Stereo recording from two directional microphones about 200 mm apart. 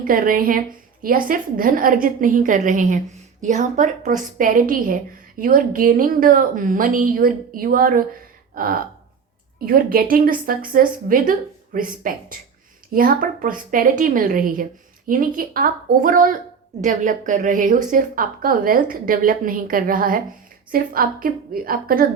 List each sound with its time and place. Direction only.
0.0 s a woman's voice: 45° right (ahead or behind)
8.5 s a sound: 45° right (ahead or behind)
9.6 s a woman's voice: 45° right (ahead or behind)